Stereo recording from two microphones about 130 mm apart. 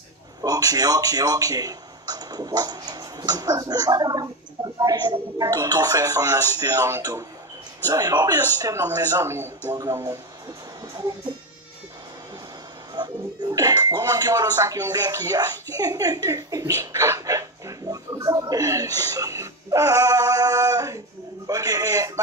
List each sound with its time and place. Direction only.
0.4 s speech: 30° right (ahead or behind)
12.9 s speech: 30° right (ahead or behind)